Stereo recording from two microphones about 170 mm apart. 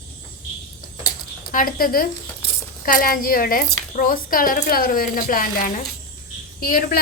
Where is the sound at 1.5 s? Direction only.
55° left (ahead or behind).